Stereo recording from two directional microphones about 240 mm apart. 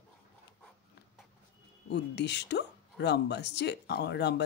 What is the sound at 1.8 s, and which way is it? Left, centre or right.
Speech, left.